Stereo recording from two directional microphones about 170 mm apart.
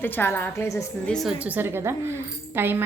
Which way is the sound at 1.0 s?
Centre (ahead or behind).